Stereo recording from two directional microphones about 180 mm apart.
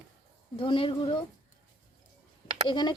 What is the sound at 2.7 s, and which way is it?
Speech, 25° left (ahead or behind).